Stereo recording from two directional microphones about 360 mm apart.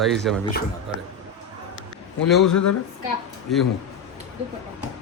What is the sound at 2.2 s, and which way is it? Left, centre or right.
Speech, centre.